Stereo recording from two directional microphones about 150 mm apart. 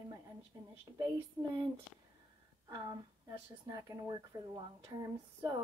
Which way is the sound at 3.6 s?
20° right (ahead or behind).